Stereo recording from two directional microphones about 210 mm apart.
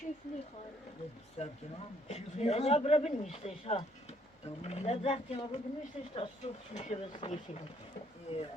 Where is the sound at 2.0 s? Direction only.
30° left (ahead or behind).